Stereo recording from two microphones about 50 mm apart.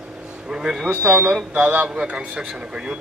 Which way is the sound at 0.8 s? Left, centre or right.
Right.